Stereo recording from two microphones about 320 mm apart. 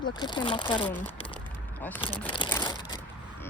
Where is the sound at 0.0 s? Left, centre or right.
Centre.